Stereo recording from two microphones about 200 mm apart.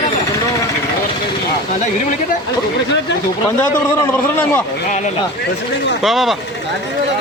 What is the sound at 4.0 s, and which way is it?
Speech, 10° left (ahead or behind).